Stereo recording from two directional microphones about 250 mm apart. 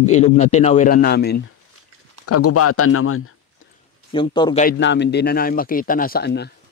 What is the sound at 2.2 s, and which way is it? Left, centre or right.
Speech, left.